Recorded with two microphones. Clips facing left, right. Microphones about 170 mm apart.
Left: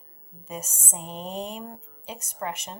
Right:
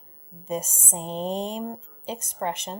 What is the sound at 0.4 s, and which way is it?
Speech, 30° right (ahead or behind).